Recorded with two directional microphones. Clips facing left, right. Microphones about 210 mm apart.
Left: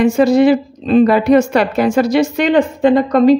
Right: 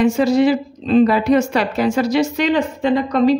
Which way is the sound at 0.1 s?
55° left (ahead or behind).